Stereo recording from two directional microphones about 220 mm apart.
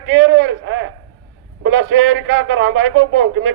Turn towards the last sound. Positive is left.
turn(degrees=-60)  # may be behind; listen again after turning